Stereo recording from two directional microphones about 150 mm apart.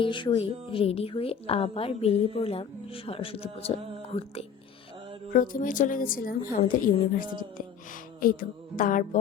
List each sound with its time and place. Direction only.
0.0 s a woman's voice: 35° left (ahead or behind)
5.3 s a woman's voice: 65° left (ahead or behind)
7.1 s a sound: 65° left (ahead or behind)
8.2 s a woman's voice: 70° left (ahead or behind)